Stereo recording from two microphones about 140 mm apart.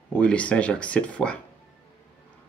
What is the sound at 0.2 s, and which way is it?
Speech, 10° left (ahead or behind).